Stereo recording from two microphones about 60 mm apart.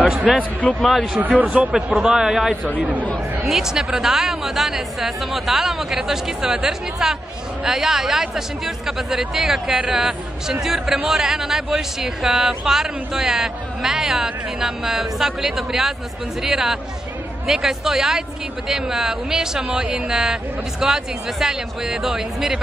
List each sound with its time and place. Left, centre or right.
0.4 s speech: left
0.7 s a woman's voice: centre
1.1 s speech: right
2.0 s speech: centre
2.8 s speech: right
3.4 s a woman's voice: centre
19.7 s speech: right
20.1 s speech: centre